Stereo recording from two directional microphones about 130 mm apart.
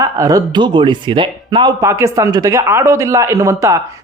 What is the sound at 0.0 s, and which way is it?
Speech, 25° right (ahead or behind).